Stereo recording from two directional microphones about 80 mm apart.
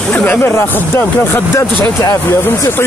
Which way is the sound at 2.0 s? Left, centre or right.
Left.